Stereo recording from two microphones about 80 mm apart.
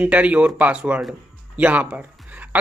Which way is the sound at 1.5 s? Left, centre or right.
Centre.